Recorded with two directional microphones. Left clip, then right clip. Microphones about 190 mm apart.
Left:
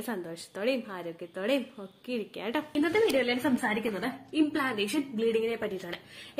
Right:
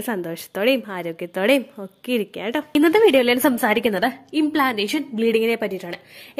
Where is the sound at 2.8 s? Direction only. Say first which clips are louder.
Right 12 dB; 60° right (ahead or behind).